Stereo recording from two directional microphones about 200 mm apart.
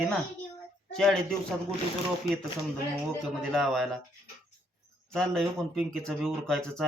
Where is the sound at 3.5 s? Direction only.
Centre (ahead or behind).